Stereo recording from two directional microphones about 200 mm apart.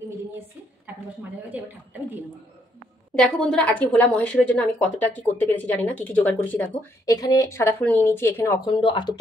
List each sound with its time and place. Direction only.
3.2 s a woman's voice: 5° left (ahead or behind)
8.6 s speech: 25° left (ahead or behind)